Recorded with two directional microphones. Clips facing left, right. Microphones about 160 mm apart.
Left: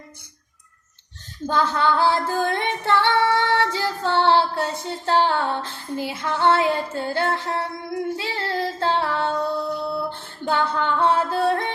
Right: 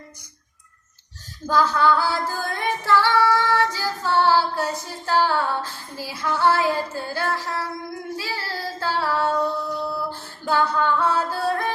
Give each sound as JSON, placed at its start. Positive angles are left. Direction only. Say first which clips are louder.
{"t": 1.5, "sound": "female singing", "louder": "right 2 dB", "side_deg": 25}
{"t": 8.1, "sound": "child singing", "louder": "left 4 dB", "side_deg": 25}
{"t": 9.9, "sound": "music", "louder": "left 2 dB", "side_deg": 25}